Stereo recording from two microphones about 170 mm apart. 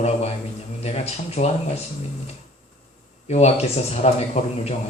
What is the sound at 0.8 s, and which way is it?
Speech, 40° left (ahead or behind).